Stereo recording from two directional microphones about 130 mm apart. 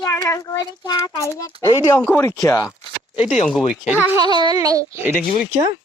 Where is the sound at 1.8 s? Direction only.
15° left (ahead or behind).